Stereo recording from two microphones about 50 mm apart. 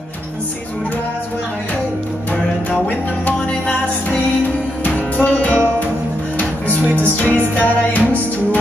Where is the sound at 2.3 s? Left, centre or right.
Left.